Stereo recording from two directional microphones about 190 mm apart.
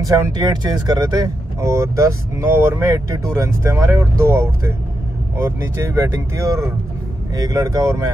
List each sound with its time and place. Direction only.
0.0 s speech: 20° right (ahead or behind)